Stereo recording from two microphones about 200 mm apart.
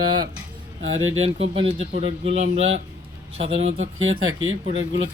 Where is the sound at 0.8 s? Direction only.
90° right.